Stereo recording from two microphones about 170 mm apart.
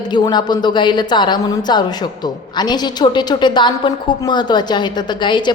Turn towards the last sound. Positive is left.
turn(degrees=25)  # may be behind; listen again after turning